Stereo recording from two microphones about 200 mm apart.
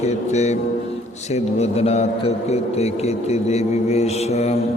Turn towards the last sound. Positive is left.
turn(degrees=30)  # may be behind; listen again after turning